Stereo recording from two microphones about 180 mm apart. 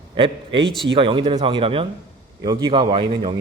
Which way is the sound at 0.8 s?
30° right (ahead or behind).